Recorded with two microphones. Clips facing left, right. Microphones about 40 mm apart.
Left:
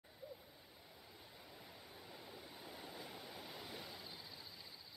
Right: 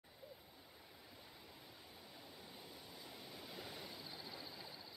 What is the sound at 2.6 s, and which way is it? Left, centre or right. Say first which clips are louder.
Waves: left 4 dB; left.